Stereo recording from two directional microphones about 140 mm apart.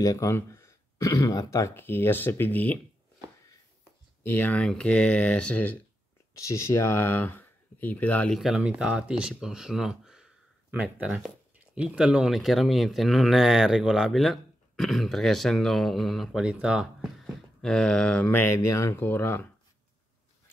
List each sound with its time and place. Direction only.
0.0 s speech: 25° left (ahead or behind)
4.2 s speech: 15° left (ahead or behind)
6.3 s speech: 20° left (ahead or behind)
8.4 s speech: 5° right (ahead or behind)
17.2 s speech: 5° left (ahead or behind)